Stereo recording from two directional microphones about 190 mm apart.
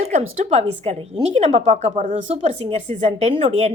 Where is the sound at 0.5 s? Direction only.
30° right (ahead or behind).